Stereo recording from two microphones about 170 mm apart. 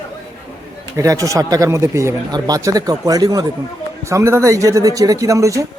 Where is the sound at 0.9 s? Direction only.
20° right (ahead or behind).